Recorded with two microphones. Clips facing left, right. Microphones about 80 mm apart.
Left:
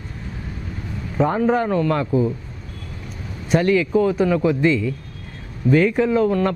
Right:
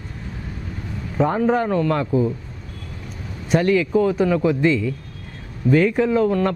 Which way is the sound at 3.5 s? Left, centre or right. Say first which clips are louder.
Even; centre.